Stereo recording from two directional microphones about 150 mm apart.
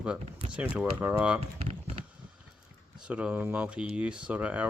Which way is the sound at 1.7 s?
45° right (ahead or behind).